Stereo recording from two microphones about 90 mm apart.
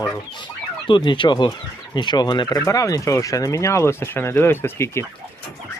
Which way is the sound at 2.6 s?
40° left (ahead or behind).